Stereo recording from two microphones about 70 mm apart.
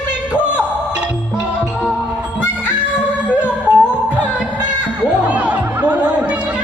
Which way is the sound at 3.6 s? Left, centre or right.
Centre.